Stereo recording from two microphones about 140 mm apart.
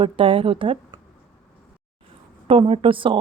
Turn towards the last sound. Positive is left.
turn(degrees=-35)  # may be behind; listen again after turning